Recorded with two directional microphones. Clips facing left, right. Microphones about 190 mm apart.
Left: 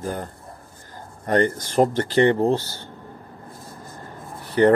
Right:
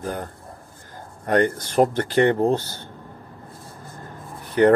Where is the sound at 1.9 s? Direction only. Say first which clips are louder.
Left 1 dB; 55° right (ahead or behind).